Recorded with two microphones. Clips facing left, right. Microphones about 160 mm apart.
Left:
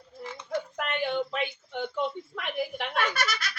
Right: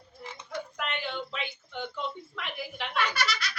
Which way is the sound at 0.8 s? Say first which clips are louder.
Left 6 dB; 50° left (ahead or behind).